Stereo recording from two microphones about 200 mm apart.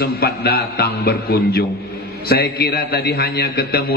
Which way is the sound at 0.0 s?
50° left (ahead or behind).